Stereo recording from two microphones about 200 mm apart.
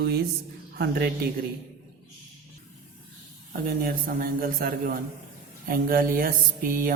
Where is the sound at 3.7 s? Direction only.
50° right (ahead or behind).